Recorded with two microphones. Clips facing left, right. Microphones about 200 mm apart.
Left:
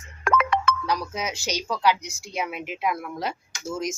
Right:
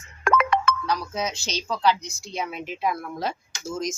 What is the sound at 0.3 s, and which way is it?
Music, 50° right (ahead or behind).